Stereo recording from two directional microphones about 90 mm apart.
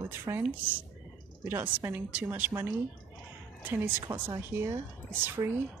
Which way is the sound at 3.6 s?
25° right (ahead or behind).